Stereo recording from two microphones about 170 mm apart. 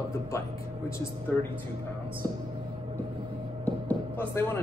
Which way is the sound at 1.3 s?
10° left (ahead or behind).